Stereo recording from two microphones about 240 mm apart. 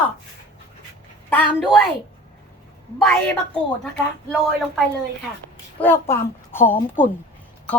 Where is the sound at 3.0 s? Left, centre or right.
Centre.